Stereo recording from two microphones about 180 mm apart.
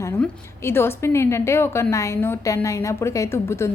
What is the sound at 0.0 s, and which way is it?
A woman's voice, 15° left (ahead or behind).